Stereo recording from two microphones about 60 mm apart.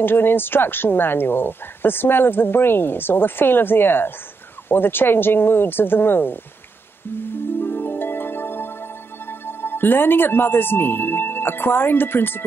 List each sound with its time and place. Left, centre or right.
0.0 s a woman's voice: left
7.2 s harp: left
9.5 s speech: left